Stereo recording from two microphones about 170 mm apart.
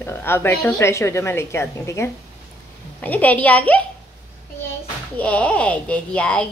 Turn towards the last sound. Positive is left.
turn(degrees=5)  # may be behind; listen again after turning